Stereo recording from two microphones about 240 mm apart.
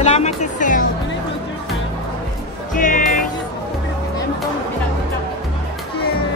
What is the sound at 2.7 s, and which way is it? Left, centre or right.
Music, left.